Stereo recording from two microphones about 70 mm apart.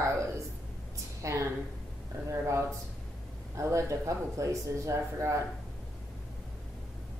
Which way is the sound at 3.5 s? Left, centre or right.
Right.